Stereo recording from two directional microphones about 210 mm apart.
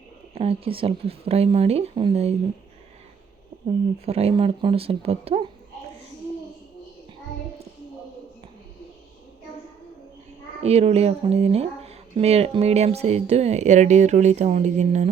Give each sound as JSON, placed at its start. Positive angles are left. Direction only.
{"t": 0.3, "sound": "speech", "side_deg": -30}
{"t": 3.5, "sound": "a sound", "side_deg": -25}
{"t": 4.0, "sound": "speech", "side_deg": -30}
{"t": 10.6, "sound": "speech", "side_deg": -30}